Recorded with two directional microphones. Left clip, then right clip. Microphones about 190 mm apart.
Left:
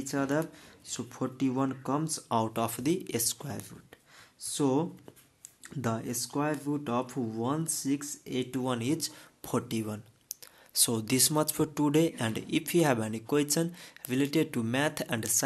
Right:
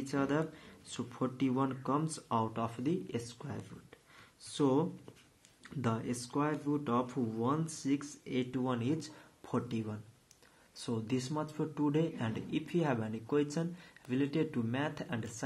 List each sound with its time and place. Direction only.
0.0 s speech: 30° left (ahead or behind)